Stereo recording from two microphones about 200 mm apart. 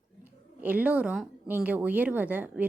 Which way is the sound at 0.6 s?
10° right (ahead or behind).